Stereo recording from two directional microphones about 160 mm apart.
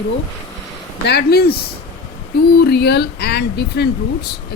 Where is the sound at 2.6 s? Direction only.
90° left.